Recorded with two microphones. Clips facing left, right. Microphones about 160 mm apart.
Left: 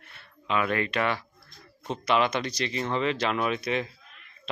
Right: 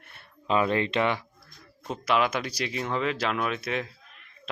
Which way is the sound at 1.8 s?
5° right (ahead or behind).